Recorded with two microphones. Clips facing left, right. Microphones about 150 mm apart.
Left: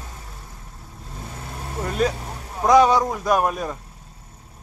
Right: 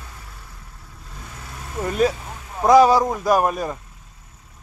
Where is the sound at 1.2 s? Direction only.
30° left (ahead or behind).